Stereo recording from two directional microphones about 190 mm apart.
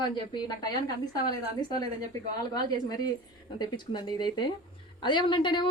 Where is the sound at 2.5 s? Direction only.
20° left (ahead or behind).